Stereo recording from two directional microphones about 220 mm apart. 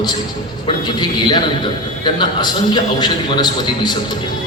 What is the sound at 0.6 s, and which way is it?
A man's voice, 20° left (ahead or behind).